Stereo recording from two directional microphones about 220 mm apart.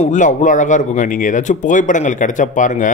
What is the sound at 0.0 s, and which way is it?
Speech, 35° left (ahead or behind).